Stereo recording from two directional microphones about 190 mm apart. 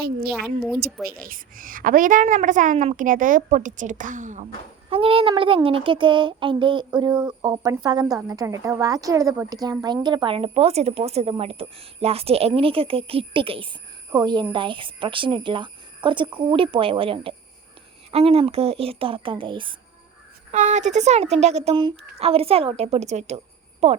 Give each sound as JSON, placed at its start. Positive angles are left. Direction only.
{"t": 0.0, "sound": "a woman's voice", "side_deg": -55}
{"t": 0.3, "sound": "a woman's voice", "side_deg": 0}
{"t": 1.0, "sound": "a woman's voice", "side_deg": -50}
{"t": 4.9, "sound": "a sound", "side_deg": -30}
{"t": 20.5, "sound": "a woman's voice", "side_deg": -40}